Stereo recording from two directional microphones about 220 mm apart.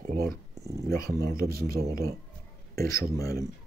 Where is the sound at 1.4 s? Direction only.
45° right (ahead or behind).